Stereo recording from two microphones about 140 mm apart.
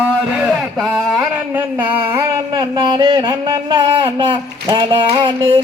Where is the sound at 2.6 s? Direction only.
30° right (ahead or behind).